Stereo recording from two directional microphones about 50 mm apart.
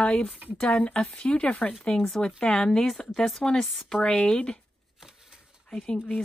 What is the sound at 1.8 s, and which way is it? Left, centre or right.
Speech, centre.